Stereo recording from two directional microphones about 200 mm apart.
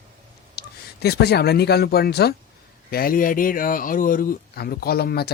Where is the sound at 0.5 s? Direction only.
55° left (ahead or behind).